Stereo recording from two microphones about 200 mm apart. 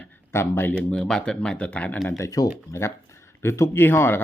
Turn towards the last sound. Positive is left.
turn(degrees=10)  # may be behind; listen again after turning